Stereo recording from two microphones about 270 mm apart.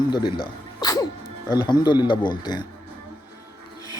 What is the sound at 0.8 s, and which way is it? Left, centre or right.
Music, centre.